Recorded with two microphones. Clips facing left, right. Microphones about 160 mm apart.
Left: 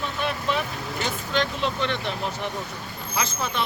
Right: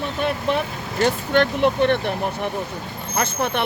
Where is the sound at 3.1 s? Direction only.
60° right (ahead or behind).